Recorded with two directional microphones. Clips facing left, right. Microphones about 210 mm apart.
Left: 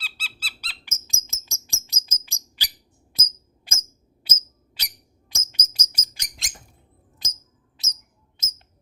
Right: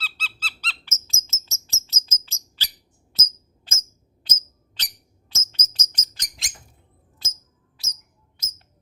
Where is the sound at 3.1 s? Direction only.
10° left (ahead or behind).